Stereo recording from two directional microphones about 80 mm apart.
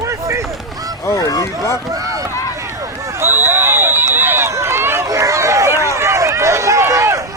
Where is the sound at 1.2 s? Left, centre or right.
Left.